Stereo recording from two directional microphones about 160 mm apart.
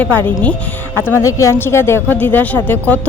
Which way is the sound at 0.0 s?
10° left (ahead or behind).